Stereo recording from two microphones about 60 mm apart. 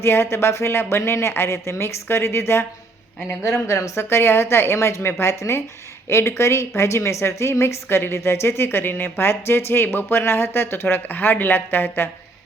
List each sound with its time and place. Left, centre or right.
0.0 s speech: left
3.7 s a woman's voice: left